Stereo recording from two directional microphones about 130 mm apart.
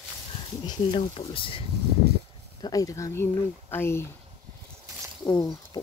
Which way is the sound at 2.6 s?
25° left (ahead or behind).